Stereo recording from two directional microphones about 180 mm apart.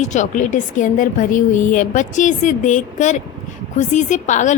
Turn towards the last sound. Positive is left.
turn(degrees=40)  # may be behind; listen again after turning